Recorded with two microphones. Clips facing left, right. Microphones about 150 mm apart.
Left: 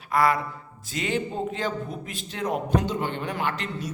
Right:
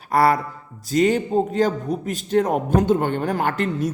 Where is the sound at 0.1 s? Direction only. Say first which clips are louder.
Right 5 dB; 40° right (ahead or behind).